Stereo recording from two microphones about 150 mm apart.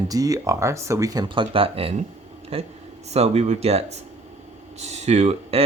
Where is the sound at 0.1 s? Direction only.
25° right (ahead or behind).